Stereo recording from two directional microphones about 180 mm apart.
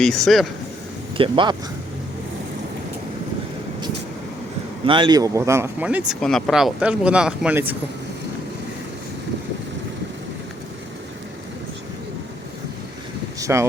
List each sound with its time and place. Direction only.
0.0 s speech: centre (ahead or behind)
1.1 s speech: 30° right (ahead or behind)
4.9 s speech: 25° right (ahead or behind); by 7.8 s 10° right (ahead or behind)
13.4 s speech: 15° right (ahead or behind)